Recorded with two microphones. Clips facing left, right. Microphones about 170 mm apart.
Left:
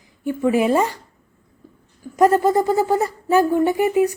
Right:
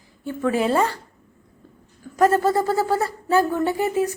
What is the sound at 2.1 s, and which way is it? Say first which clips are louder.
Speech: left 3 dB; 15° left (ahead or behind).